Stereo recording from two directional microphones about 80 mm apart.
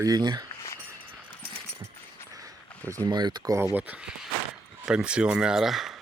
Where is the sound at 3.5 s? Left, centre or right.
Right.